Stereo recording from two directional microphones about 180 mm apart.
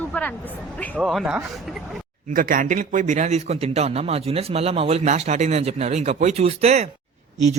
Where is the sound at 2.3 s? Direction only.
50° right (ahead or behind).